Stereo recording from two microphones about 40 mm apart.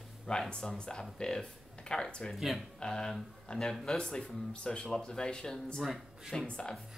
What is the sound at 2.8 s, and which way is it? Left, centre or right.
Speech, centre.